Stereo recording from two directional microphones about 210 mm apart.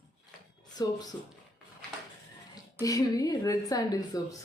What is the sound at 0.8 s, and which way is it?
Speech, 20° left (ahead or behind).